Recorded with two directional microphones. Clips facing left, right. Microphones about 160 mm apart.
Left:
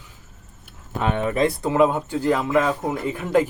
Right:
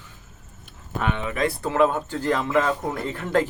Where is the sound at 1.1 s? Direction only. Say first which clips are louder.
Left 6 dB; 45° left (ahead or behind).